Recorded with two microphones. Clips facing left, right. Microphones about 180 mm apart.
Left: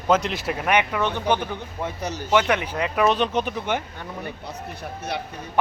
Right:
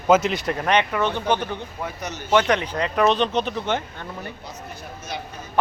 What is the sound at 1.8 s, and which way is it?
Speech, 30° left (ahead or behind).